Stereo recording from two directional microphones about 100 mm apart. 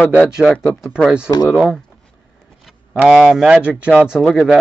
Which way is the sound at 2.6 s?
5° right (ahead or behind).